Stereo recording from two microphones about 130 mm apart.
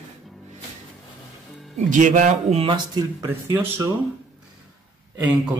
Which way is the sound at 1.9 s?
75° right (ahead or behind).